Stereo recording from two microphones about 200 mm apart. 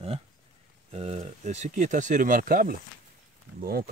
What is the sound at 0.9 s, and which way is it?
Speech, 30° right (ahead or behind).